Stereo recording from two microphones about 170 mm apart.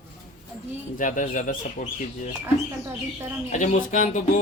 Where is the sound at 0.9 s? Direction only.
50° left (ahead or behind).